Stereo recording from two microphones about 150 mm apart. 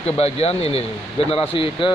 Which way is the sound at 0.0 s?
45° left (ahead or behind).